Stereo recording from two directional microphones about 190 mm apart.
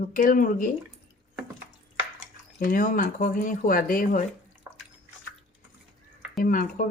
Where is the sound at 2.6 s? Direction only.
45° left (ahead or behind).